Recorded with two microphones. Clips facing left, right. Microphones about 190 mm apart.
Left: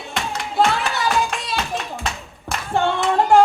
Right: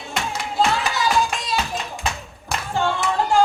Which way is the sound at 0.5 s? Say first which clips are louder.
Left 2 dB; 60° left (ahead or behind).